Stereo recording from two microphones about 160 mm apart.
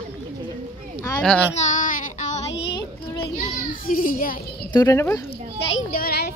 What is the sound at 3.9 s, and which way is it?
Children playing, 60° left (ahead or behind).